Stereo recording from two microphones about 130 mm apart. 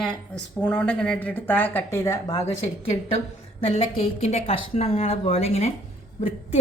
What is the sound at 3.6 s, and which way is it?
A woman's voice, 60° left (ahead or behind).